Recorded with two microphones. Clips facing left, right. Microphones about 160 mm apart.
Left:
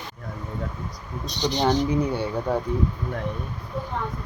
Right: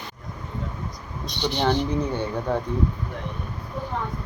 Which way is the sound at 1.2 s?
40° left (ahead or behind).